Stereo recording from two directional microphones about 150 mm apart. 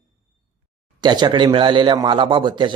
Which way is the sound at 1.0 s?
30° right (ahead or behind).